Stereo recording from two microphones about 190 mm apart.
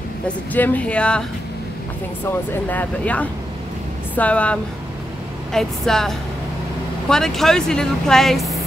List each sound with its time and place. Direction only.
0.5 s speech: 10° left (ahead or behind)
2.7 s a woman's voice: 10° left (ahead or behind)